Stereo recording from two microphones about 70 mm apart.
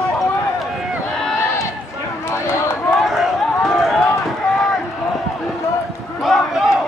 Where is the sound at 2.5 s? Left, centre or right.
Left.